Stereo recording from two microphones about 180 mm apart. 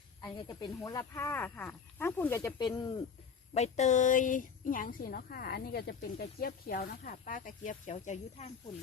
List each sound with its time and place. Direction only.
0.2 s speech: 20° left (ahead or behind)
3.5 s speech: 40° left (ahead or behind)